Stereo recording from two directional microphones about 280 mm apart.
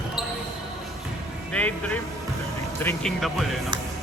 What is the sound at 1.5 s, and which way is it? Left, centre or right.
Speech, centre.